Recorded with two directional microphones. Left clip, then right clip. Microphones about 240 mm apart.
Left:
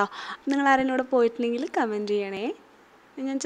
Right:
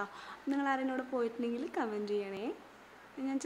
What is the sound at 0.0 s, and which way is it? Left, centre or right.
A woman's voice, left.